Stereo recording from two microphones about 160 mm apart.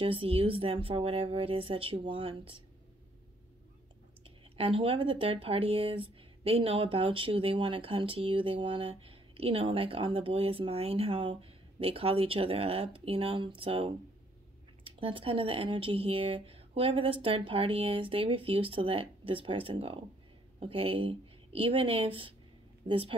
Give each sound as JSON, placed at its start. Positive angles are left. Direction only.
{"t": 0.0, "sound": "speech", "side_deg": -35}
{"t": 4.6, "sound": "speech", "side_deg": -35}